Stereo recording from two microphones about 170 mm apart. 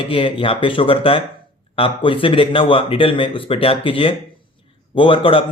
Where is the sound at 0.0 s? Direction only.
30° left (ahead or behind).